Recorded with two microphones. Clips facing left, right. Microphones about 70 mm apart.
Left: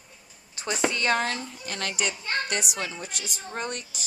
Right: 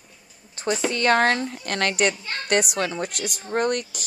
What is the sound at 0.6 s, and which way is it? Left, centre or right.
Speech, right.